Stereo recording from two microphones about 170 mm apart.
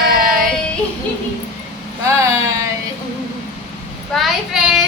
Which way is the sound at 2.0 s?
15° right (ahead or behind).